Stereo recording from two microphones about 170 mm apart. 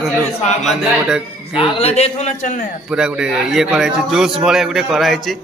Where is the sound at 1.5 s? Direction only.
40° left (ahead or behind).